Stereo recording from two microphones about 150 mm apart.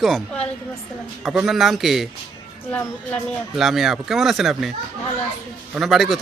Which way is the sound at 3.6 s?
Centre (ahead or behind).